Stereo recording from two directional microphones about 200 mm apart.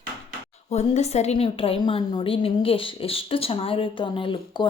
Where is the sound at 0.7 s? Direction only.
35° left (ahead or behind).